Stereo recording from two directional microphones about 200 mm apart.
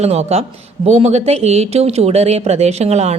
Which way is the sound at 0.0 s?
30° right (ahead or behind).